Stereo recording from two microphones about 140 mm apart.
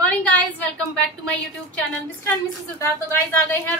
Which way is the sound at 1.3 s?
10° left (ahead or behind).